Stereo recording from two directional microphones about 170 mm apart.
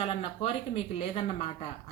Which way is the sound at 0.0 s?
35° left (ahead or behind).